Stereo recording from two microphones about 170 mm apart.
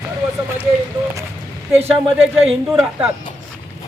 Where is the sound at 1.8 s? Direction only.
35° right (ahead or behind).